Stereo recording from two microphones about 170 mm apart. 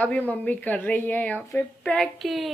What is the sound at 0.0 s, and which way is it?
A woman's voice, 10° left (ahead or behind).